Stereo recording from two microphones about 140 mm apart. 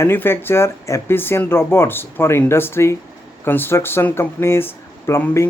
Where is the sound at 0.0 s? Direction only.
15° left (ahead or behind).